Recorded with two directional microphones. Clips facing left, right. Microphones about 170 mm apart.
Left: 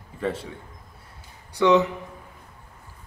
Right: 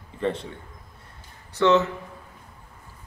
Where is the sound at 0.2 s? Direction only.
5° left (ahead or behind).